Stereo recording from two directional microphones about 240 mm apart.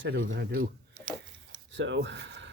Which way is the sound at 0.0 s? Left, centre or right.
Right.